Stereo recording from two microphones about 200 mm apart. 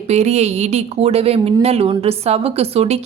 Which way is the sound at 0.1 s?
35° right (ahead or behind).